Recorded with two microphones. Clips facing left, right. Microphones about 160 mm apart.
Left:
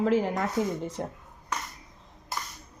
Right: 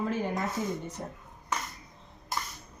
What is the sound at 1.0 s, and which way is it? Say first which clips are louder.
Speech: left 5 dB; 75° left (ahead or behind).